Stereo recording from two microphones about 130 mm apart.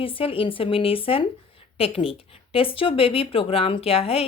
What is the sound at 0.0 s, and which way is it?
Speech, 45° left (ahead or behind).